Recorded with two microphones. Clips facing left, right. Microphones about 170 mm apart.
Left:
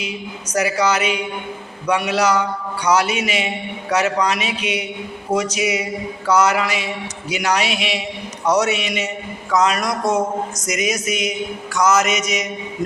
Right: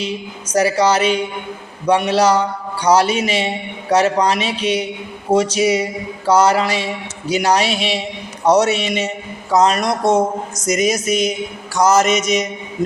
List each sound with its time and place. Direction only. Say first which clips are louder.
0.5 s a man's voice: right 4 dB; 30° right (ahead or behind)